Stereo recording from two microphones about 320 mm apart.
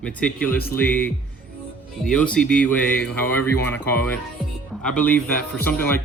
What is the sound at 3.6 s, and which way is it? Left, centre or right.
Speech, centre.